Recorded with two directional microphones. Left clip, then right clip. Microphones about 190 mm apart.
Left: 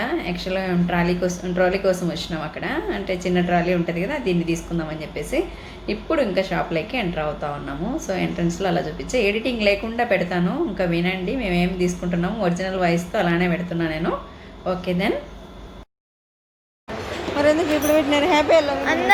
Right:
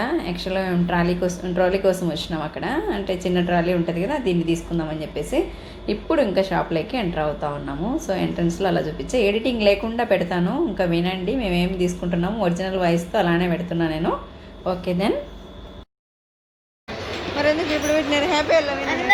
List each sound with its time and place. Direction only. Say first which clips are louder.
0.0 s a woman's voice: right 1 dB; 10° right (ahead or behind)
17.3 s a woman's voice: left 2 dB; 25° left (ahead or behind)